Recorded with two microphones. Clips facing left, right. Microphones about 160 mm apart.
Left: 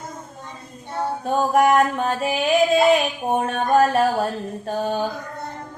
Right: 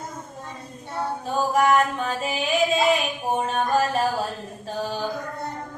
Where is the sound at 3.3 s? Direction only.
55° left (ahead or behind).